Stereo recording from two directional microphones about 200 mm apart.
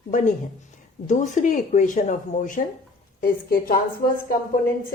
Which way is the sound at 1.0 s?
40° left (ahead or behind).